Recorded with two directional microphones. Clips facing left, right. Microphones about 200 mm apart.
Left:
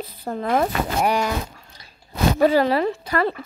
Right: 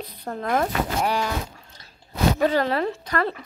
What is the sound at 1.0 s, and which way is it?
Speech, 15° left (ahead or behind).